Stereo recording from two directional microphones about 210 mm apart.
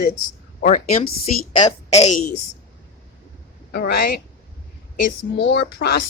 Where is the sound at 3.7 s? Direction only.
50° left (ahead or behind).